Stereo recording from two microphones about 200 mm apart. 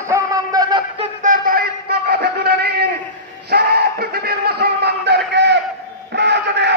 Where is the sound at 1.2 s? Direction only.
40° right (ahead or behind).